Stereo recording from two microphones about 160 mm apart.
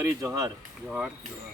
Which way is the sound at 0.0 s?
20° right (ahead or behind).